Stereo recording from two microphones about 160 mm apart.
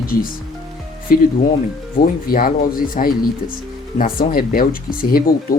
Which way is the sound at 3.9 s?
60° left (ahead or behind).